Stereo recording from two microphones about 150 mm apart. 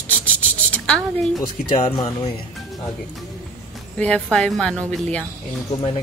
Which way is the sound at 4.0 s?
5° left (ahead or behind).